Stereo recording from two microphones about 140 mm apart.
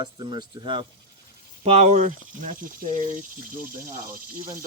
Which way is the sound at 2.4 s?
75° right (ahead or behind).